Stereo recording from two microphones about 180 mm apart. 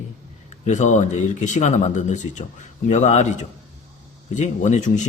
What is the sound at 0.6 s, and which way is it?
A man's voice, 40° left (ahead or behind).